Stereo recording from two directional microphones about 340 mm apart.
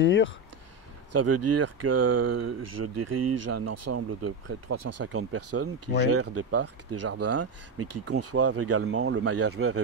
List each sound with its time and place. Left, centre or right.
0.0 s speech: left
1.1 s speech: right